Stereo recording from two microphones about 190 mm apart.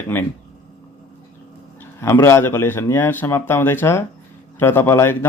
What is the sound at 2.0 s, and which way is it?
Speech, 15° left (ahead or behind).